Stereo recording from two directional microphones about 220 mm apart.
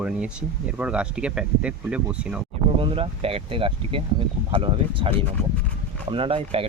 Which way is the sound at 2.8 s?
25° right (ahead or behind).